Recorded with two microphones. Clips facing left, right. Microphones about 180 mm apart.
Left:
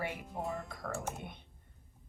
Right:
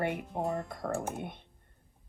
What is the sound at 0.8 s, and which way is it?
Speech, 50° right (ahead or behind).